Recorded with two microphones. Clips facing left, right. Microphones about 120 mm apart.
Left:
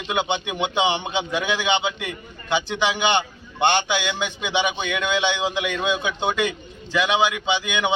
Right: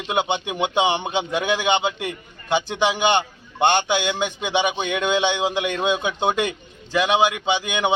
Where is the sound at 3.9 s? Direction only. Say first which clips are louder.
Right 3 dB; 45° right (ahead or behind).